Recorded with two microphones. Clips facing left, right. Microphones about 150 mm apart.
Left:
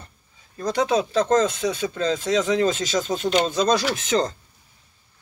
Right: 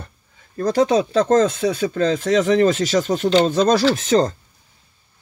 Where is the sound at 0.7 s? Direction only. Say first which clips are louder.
Right 4 dB; 40° right (ahead or behind).